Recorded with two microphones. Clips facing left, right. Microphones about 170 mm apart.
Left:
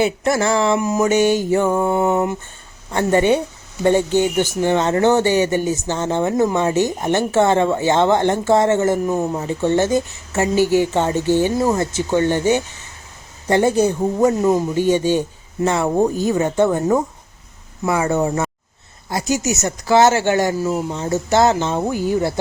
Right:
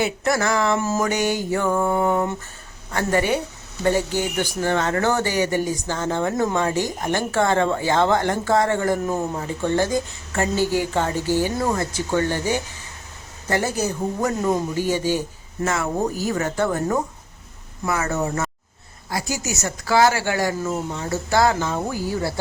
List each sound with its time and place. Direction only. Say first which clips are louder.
0.0 s speech: left 4 dB; 25° left (ahead or behind)
18.1 s speech: left 5 dB; 25° left (ahead or behind)
20.6 s speech: left 5 dB; 10° left (ahead or behind)
21.0 s speech: left 4 dB; 20° left (ahead or behind)